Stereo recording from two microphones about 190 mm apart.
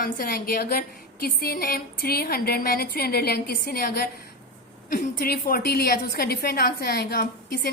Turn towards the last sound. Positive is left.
turn(degrees=50)  # may be behind; listen again after turning